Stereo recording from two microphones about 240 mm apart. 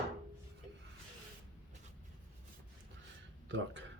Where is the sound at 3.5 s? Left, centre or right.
Right.